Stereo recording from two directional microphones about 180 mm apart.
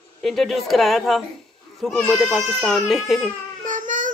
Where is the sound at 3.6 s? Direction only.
45° right (ahead or behind).